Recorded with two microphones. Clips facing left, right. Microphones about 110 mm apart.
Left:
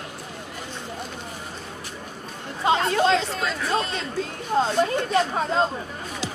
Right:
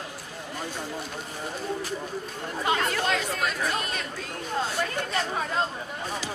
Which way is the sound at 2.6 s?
25° left (ahead or behind).